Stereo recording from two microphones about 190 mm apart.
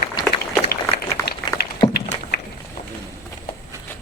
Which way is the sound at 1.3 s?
60° left (ahead or behind).